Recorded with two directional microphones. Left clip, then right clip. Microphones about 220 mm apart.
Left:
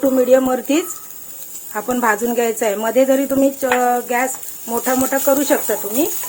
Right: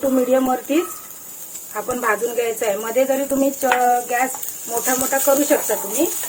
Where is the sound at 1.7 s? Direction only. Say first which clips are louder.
Left 3 dB; 45° left (ahead or behind).